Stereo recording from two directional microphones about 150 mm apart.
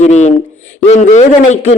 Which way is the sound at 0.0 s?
50° left (ahead or behind).